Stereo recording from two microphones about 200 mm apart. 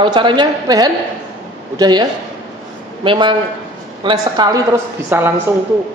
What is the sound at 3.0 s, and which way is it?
Speech, 25° right (ahead or behind).